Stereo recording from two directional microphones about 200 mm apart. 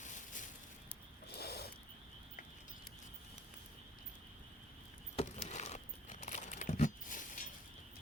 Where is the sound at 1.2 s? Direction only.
50° left (ahead or behind).